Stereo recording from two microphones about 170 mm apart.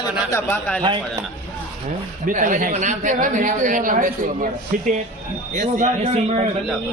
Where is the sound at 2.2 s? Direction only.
50° right (ahead or behind).